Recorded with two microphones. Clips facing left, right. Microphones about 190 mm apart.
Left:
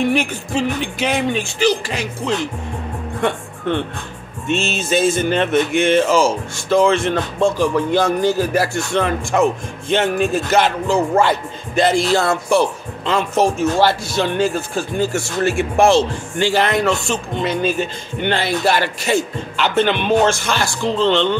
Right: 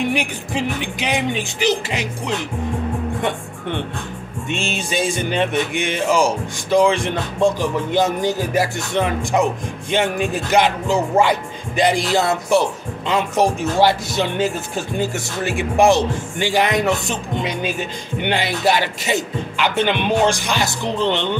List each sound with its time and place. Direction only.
0.1 s speech: 15° right (ahead or behind)
3.2 s music: 15° right (ahead or behind)
4.5 s speech: 15° right (ahead or behind)